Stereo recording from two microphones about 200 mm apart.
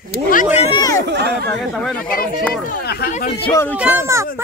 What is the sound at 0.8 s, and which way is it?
Speech, 15° left (ahead or behind).